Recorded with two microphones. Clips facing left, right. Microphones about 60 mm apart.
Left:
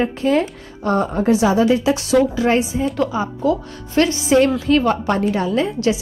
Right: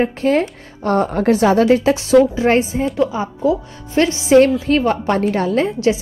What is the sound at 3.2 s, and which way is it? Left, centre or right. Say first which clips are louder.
A woman's voice: right 1 dB; right.